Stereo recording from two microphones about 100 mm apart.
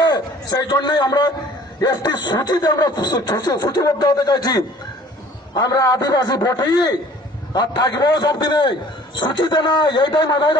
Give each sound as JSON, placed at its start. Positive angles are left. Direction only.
{"t": 0.0, "sound": "a man's voice", "side_deg": 40}